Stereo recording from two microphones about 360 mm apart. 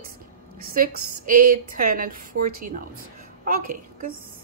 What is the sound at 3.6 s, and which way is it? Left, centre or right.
Speech, right.